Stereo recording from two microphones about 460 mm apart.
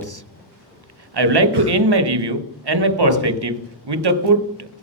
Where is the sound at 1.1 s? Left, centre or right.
Right.